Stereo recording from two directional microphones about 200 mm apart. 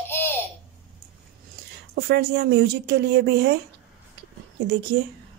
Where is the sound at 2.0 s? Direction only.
55° right (ahead or behind).